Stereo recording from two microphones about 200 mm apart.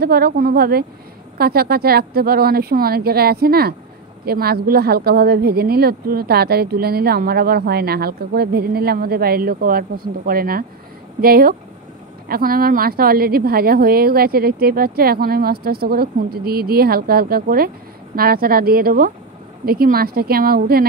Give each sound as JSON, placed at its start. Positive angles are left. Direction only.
{"t": 0.0, "sound": "speech", "side_deg": -50}